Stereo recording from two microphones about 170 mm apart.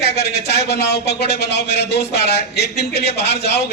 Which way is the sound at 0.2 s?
70° left (ahead or behind).